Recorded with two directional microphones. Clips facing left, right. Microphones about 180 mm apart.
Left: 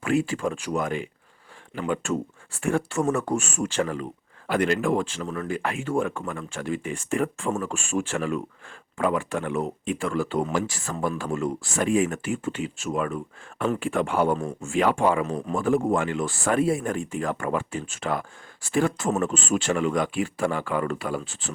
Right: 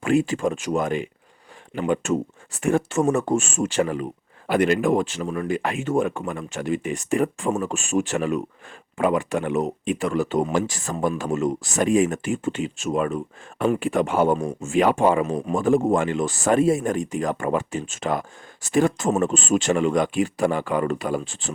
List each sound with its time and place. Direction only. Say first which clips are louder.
0.0 s speech: right 4 dB; 25° right (ahead or behind)